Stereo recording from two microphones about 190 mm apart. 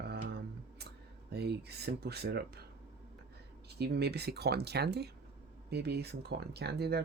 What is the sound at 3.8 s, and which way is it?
Speech, 60° right (ahead or behind).